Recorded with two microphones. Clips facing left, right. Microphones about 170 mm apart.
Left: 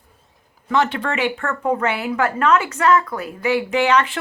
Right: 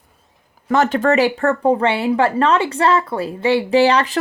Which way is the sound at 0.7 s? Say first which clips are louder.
Right 5 dB; 45° right (ahead or behind).